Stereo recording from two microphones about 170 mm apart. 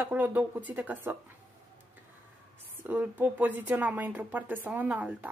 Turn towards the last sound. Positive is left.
turn(degrees=-10)  # may be behind; listen again after turning